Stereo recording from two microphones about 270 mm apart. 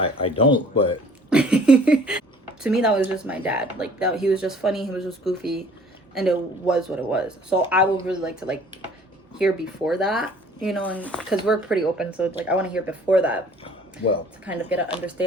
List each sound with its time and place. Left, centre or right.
0.0 s speech: left
1.3 s speech: centre
14.4 s speech: centre